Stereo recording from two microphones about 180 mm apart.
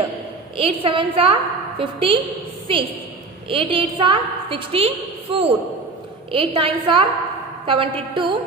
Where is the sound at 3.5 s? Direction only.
30° right (ahead or behind).